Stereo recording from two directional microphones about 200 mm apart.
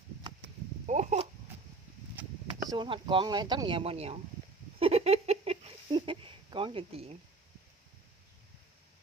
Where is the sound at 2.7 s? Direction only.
25° right (ahead or behind).